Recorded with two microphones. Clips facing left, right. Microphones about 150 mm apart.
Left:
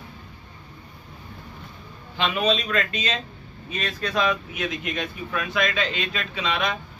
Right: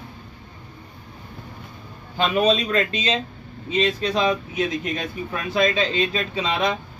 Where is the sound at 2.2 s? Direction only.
40° right (ahead or behind).